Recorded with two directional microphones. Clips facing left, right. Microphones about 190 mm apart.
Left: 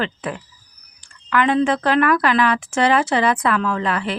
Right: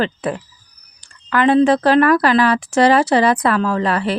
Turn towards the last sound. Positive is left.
turn(degrees=-35)  # may be behind; listen again after turning